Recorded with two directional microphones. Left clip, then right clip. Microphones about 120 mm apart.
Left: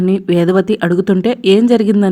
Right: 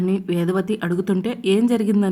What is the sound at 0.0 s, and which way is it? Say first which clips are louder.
A woman's voice: left 9 dB; 45° left (ahead or behind).